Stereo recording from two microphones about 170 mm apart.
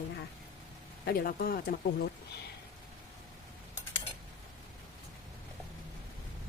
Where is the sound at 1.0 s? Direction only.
60° left (ahead or behind).